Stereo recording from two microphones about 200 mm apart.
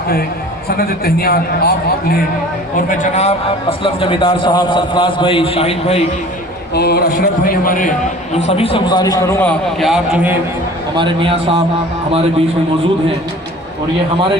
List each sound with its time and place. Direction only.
0.8 s a man's voice: 50° left (ahead or behind)
2.7 s a man's voice: 35° left (ahead or behind)
6.7 s a man's voice: 50° left (ahead or behind); by 10.3 s 5° right (ahead or behind)
10.9 s a man's voice: 25° right (ahead or behind)